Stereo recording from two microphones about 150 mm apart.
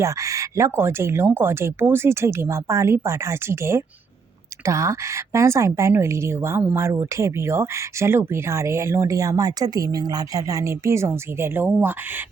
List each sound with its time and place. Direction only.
0.0 s a woman's voice: 20° right (ahead or behind)